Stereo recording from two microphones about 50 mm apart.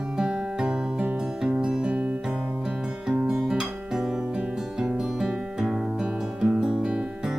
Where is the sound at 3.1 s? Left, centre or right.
Centre.